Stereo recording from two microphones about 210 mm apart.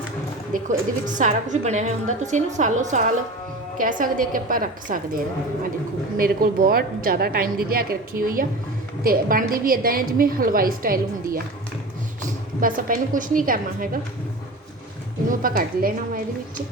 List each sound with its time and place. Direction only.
0.5 s a woman's voice: 40° right (ahead or behind)
12.5 s a woman's voice: 40° right (ahead or behind)
15.3 s a woman's voice: 40° right (ahead or behind)